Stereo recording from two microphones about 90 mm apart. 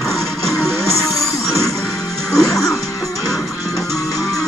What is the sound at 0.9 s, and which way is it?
Music, 35° left (ahead or behind).